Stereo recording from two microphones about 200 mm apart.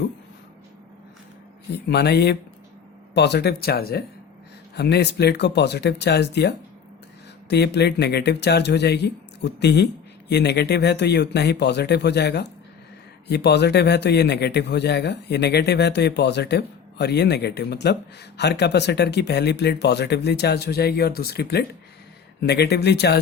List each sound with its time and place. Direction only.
1.7 s a man's voice: 55° left (ahead or behind)
7.5 s a man's voice: 55° left (ahead or behind)